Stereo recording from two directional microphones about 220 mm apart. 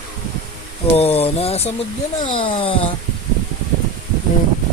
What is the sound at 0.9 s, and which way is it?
Speech, 25° left (ahead or behind).